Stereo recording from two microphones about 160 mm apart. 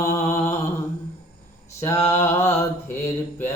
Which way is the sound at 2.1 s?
15° left (ahead or behind).